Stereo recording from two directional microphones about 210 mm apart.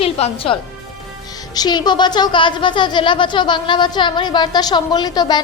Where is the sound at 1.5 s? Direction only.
20° left (ahead or behind).